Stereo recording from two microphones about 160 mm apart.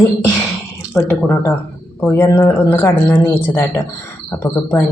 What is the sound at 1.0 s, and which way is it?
Speech, 15° left (ahead or behind).